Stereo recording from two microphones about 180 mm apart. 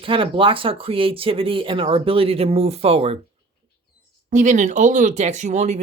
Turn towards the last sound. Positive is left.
turn(degrees=-40)  # may be behind; listen again after turning